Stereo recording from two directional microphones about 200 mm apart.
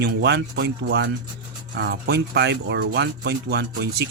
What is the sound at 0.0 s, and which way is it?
Speech, 55° right (ahead or behind).